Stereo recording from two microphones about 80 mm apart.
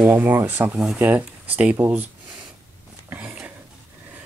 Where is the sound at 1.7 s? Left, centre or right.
Right.